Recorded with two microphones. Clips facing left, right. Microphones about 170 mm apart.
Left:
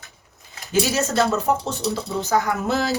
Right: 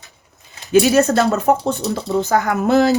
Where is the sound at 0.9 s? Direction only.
60° right (ahead or behind).